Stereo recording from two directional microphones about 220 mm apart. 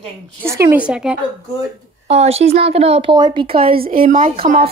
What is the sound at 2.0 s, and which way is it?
Speech, 30° right (ahead or behind).